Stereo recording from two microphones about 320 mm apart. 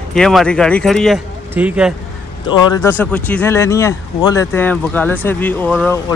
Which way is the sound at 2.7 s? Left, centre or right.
Centre.